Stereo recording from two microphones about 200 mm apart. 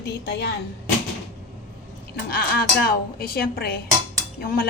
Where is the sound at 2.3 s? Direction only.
45° left (ahead or behind).